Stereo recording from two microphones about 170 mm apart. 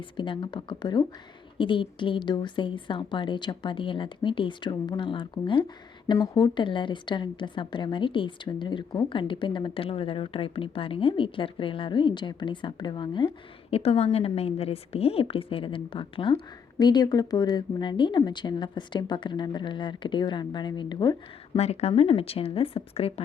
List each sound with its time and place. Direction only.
0.2 s a woman's voice: 30° left (ahead or behind)
21.5 s a woman's voice: 40° left (ahead or behind)